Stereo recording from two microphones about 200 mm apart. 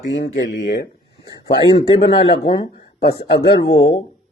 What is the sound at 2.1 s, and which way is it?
Speech, 25° left (ahead or behind).